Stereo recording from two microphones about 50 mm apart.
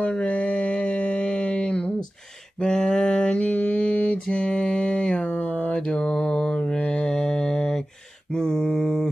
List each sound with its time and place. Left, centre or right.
0.0 s mantra: left
5.8 s mantra: centre
6.0 s mantra: left; by 9.0 s centre